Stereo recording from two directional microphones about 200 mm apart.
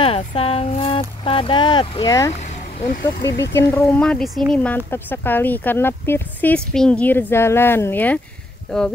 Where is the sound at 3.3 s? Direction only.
60° left (ahead or behind).